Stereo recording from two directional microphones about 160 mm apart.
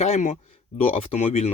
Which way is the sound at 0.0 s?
40° left (ahead or behind).